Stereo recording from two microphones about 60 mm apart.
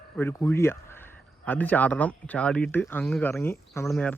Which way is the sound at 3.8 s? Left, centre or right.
Left.